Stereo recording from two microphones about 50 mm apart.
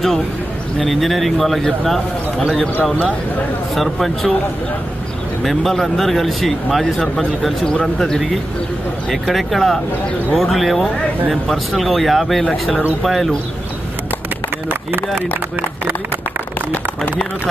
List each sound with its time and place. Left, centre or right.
0.7 s a man's voice: centre
5.4 s a man's voice: centre
14.7 s speech: right